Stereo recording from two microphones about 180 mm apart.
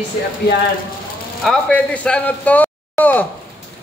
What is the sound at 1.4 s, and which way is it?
Speech, 5° left (ahead or behind).